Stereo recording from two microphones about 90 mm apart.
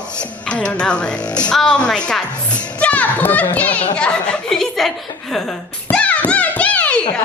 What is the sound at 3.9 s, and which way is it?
Chuckle, 10° left (ahead or behind).